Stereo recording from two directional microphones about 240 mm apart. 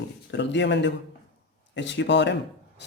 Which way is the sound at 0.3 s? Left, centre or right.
Left.